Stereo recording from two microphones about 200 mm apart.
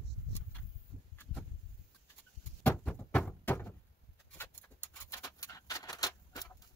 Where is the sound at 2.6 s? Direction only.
10° left (ahead or behind).